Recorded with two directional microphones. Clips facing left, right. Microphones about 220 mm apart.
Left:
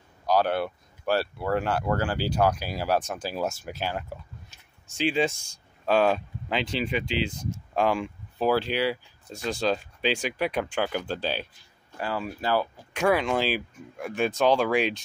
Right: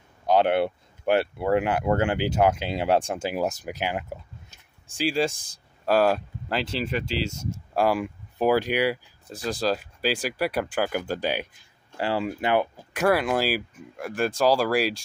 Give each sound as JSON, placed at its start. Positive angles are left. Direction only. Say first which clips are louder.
{"t": 0.3, "sound": "speech", "louder": "right 3 dB", "side_deg": -25}
{"t": 3.3, "sound": "speech", "louder": "right 3 dB", "side_deg": -15}
{"t": 5.9, "sound": "speech", "louder": "right 1 dB", "side_deg": -5}
{"t": 9.3, "sound": "speech", "louder": "right 1 dB", "side_deg": 0}
{"t": 12.0, "sound": "speech", "louder": "right 4 dB", "side_deg": -25}
{"t": 12.9, "sound": "speech", "louder": "right 1 dB", "side_deg": -5}